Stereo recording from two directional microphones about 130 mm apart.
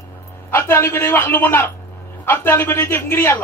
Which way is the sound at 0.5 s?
20° left (ahead or behind).